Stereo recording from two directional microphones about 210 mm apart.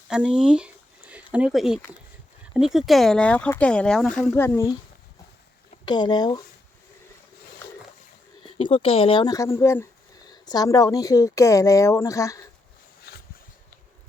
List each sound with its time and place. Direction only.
0.1 s speech: 5° right (ahead or behind); by 4.7 s 10° left (ahead or behind)
5.8 s speech: 20° left (ahead or behind)
8.5 s speech: 25° left (ahead or behind)
13.1 s a sound: 50° left (ahead or behind)